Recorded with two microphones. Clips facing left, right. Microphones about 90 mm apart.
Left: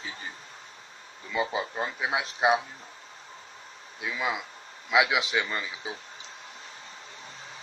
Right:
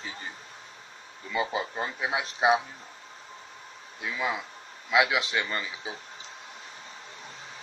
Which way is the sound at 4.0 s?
5° left (ahead or behind).